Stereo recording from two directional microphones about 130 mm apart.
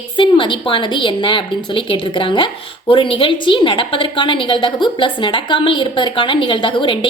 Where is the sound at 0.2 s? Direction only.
40° left (ahead or behind).